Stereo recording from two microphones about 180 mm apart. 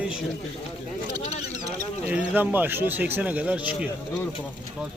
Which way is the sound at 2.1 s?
10° right (ahead or behind).